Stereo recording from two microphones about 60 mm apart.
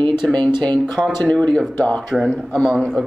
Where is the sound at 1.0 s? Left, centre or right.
Centre.